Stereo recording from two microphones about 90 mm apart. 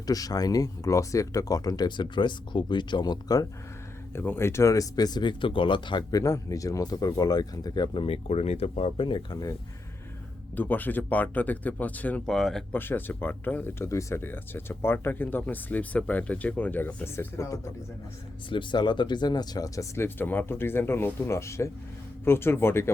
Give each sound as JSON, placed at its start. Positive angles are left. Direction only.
{"t": 0.0, "sound": "speech", "side_deg": 45}
{"t": 4.1, "sound": "speech", "side_deg": 25}
{"t": 7.9, "sound": "speech", "side_deg": 90}
{"t": 9.3, "sound": "speech", "side_deg": 45}
{"t": 10.5, "sound": "speech", "side_deg": 20}
{"t": 12.2, "sound": "speech", "side_deg": 5}
{"t": 12.7, "sound": "speech", "side_deg": 20}
{"t": 18.4, "sound": "speech", "side_deg": 60}
{"t": 20.1, "sound": "speech", "side_deg": 20}